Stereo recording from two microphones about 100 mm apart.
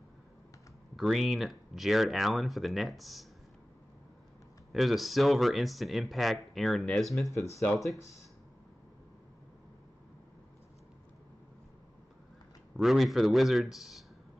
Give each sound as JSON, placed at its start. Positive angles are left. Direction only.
{"t": 0.9, "sound": "speech", "side_deg": 0}
{"t": 4.7, "sound": "speech", "side_deg": 0}
{"t": 7.2, "sound": "speech", "side_deg": 30}
{"t": 7.6, "sound": "speech", "side_deg": 5}
{"t": 12.7, "sound": "speech", "side_deg": 0}